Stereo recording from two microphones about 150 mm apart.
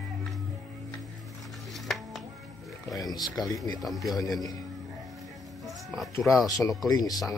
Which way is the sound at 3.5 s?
25° left (ahead or behind).